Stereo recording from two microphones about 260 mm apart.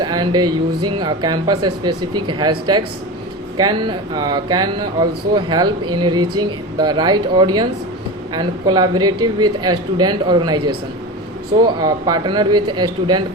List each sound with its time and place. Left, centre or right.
0.0 s a sound: centre
0.9 s speech: centre
3.6 s speech: centre
11.6 s speech: centre